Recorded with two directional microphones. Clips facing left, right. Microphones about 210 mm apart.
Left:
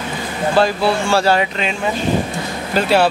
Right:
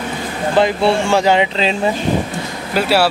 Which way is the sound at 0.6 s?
20° right (ahead or behind).